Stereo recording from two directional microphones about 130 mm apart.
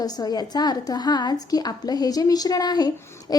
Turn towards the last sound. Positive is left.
turn(degrees=30)  # may be behind; listen again after turning